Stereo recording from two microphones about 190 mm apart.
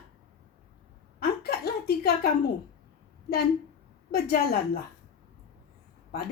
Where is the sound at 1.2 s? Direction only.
55° left (ahead or behind).